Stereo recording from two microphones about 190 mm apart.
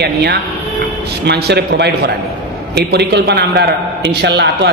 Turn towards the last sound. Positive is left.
turn(degrees=-65)  # may be behind; listen again after turning